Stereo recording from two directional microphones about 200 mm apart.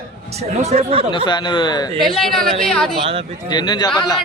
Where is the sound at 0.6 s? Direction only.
30° right (ahead or behind).